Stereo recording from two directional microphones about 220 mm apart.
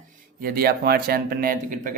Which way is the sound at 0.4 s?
45° right (ahead or behind).